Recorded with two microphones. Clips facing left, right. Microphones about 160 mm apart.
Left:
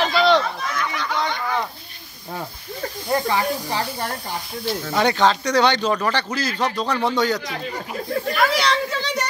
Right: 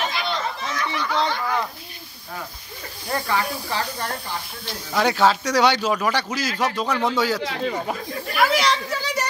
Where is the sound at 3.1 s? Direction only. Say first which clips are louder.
Left 3 dB; 20° left (ahead or behind).